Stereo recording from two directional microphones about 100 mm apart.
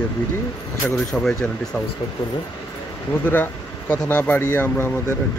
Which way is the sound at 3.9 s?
15° left (ahead or behind).